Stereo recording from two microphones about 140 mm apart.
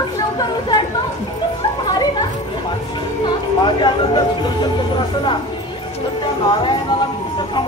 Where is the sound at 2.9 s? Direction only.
35° left (ahead or behind).